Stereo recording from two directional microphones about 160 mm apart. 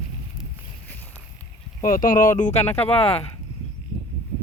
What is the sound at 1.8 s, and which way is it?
Speech, 60° left (ahead or behind).